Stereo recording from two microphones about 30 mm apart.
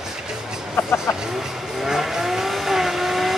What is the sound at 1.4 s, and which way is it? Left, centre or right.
Vehicle, centre.